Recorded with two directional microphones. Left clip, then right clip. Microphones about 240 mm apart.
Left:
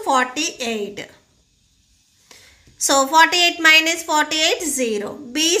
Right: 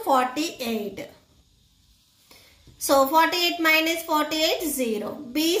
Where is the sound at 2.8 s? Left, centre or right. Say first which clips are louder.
Left 5 dB; left.